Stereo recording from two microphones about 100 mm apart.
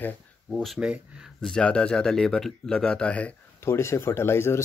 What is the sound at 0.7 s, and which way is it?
Speech, 10° right (ahead or behind).